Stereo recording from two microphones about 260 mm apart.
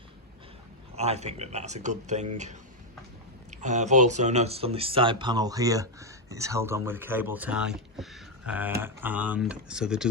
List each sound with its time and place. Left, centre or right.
0.9 s speech: right; by 10.1 s centre